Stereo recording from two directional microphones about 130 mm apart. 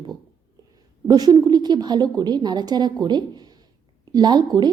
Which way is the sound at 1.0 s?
30° right (ahead or behind).